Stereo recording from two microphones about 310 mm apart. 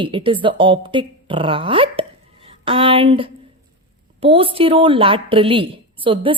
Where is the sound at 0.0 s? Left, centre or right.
Centre.